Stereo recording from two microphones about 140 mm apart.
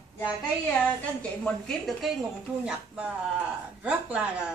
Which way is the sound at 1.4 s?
Centre (ahead or behind).